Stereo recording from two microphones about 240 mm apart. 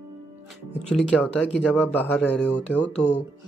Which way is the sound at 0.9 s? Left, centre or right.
Centre.